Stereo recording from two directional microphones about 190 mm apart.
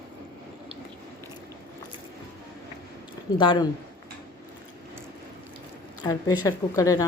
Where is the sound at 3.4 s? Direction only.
25° left (ahead or behind).